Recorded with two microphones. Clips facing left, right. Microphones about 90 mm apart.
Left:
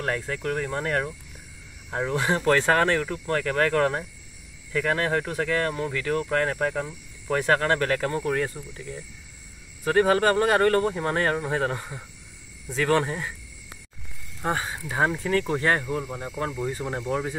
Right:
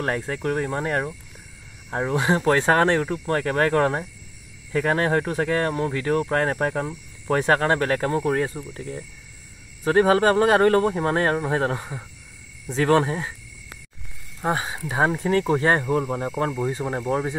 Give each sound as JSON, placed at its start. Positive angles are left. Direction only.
{"t": 0.0, "sound": "speech", "side_deg": -30}
{"t": 7.3, "sound": "speech", "side_deg": -25}
{"t": 8.7, "sound": "speech", "side_deg": -45}
{"t": 9.8, "sound": "speech", "side_deg": -25}
{"t": 14.4, "sound": "speech", "side_deg": -15}
{"t": 15.9, "sound": "speech", "side_deg": -40}